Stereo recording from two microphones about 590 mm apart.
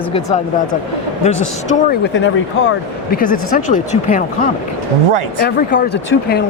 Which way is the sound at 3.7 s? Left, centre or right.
Centre.